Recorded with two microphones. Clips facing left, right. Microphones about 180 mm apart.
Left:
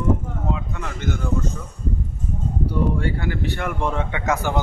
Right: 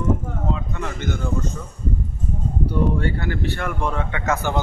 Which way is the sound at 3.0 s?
10° left (ahead or behind).